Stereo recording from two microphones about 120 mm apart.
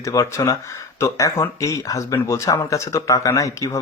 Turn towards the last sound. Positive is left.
turn(degrees=25)  # may be behind; listen again after turning